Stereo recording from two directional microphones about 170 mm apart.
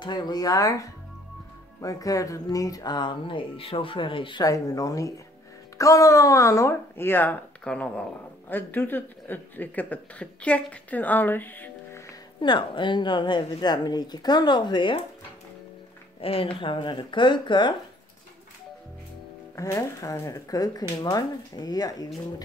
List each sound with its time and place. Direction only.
0.0 s speech: 25° left (ahead or behind)
12.4 s speech: 25° left (ahead or behind)
16.2 s speech: 35° left (ahead or behind)
19.5 s speech: 20° left (ahead or behind)